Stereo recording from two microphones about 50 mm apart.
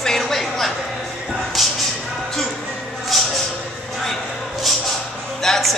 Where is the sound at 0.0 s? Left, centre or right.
Centre.